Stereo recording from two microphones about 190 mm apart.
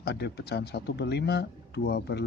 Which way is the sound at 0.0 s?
60° left (ahead or behind).